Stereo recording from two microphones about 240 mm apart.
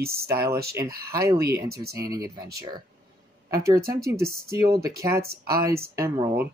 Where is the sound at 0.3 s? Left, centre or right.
Centre.